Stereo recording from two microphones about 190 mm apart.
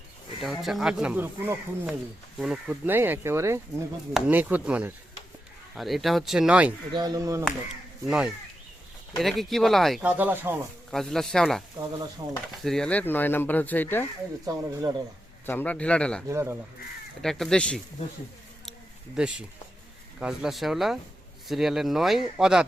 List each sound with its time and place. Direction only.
0.4 s speech: centre (ahead or behind)
6.9 s speech: 20° right (ahead or behind)
7.4 s speech: 5° right (ahead or behind)
10.9 s speech: centre (ahead or behind)
12.6 s speech: 5° left (ahead or behind)
14.4 s speech: 20° right (ahead or behind)
15.4 s speech: 10° left (ahead or behind)
16.3 s speech: 15° right (ahead or behind)
17.2 s speech: centre (ahead or behind)
19.1 s speech: 5° right (ahead or behind)